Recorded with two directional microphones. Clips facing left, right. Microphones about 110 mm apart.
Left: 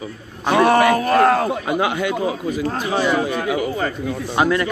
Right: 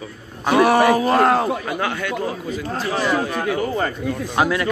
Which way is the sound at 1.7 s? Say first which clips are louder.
Left 4 dB; 15° left (ahead or behind).